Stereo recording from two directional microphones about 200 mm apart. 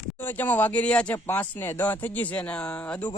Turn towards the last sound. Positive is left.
turn(degrees=5)  # may be behind; listen again after turning